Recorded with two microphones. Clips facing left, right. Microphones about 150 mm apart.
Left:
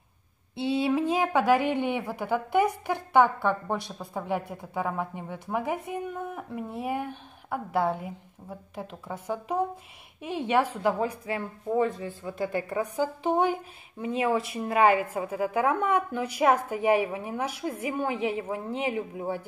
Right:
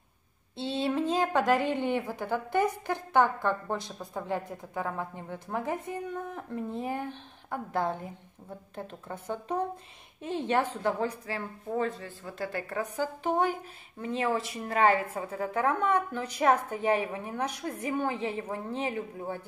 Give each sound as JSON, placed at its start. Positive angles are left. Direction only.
{"t": 0.6, "sound": "a woman's voice", "side_deg": 10}